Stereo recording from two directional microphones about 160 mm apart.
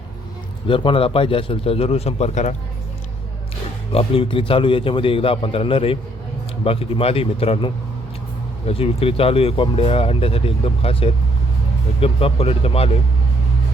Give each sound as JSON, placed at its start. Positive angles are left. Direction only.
{"t": 0.7, "sound": "speech", "side_deg": 30}
{"t": 3.9, "sound": "speech", "side_deg": 35}